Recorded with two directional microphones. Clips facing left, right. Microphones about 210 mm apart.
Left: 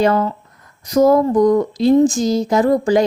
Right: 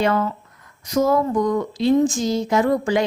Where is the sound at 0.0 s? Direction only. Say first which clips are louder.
Left 4 dB; 35° left (ahead or behind).